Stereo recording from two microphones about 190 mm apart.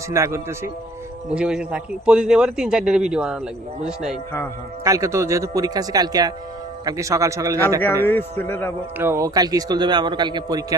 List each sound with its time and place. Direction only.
0.1 s a man's voice: 15° right (ahead or behind)
4.8 s speech: 15° right (ahead or behind)
8.0 s a man's voice: 10° left (ahead or behind)
9.0 s a man's voice: 15° right (ahead or behind)